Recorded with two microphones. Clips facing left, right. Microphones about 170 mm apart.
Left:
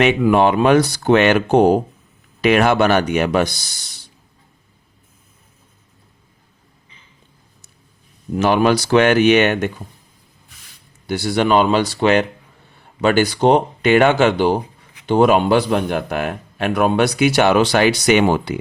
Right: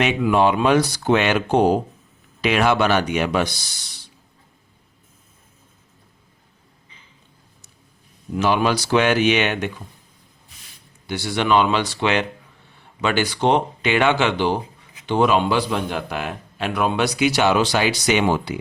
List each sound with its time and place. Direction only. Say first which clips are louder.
0.0 s a man's voice: left 4 dB; 55° left (ahead or behind)
8.4 s a man's voice: left 4 dB; 50° left (ahead or behind)
11.1 s a man's voice: left 3 dB; 45° left (ahead or behind)